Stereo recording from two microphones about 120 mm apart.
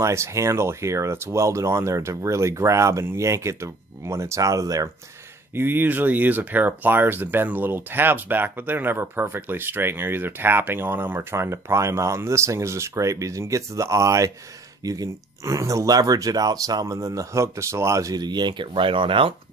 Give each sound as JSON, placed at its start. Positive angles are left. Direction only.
{"t": 0.0, "sound": "speech", "side_deg": -25}
{"t": 5.5, "sound": "speech", "side_deg": -15}